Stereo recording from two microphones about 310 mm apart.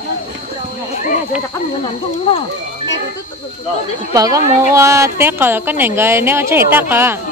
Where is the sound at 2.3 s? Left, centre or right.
Centre.